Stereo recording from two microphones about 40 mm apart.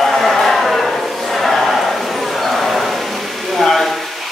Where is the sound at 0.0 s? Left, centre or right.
Centre.